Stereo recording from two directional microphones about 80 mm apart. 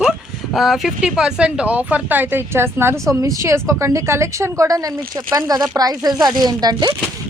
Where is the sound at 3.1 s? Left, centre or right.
Right.